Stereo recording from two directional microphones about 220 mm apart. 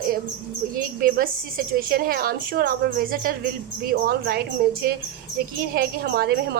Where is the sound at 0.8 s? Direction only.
40° right (ahead or behind).